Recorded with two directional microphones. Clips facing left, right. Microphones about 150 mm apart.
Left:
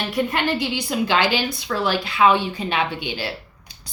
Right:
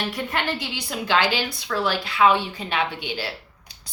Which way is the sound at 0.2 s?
15° left (ahead or behind).